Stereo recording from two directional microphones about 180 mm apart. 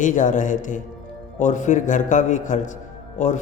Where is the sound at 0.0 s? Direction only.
45° left (ahead or behind).